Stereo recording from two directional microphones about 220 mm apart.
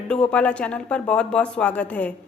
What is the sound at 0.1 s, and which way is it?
A woman's voice, 5° left (ahead or behind).